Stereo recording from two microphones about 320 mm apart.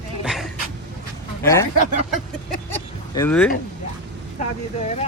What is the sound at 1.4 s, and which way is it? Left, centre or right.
Speech, centre.